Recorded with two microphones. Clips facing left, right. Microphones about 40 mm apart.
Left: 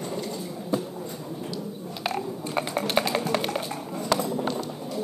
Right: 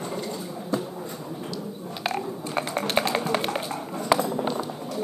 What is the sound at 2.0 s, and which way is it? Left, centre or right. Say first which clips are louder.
Typing: right 1 dB; centre.